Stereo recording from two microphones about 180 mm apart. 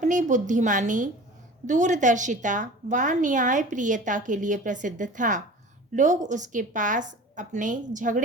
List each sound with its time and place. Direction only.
0.0 s a woman's voice: 45° right (ahead or behind)